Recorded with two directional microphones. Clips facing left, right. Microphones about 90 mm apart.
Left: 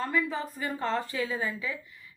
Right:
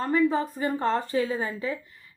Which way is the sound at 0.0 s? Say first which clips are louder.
Right 6 dB; 35° right (ahead or behind).